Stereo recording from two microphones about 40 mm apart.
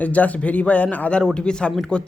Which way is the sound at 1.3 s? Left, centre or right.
Left.